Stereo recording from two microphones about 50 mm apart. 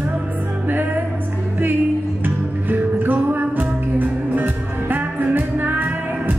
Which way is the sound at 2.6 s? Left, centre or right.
Right.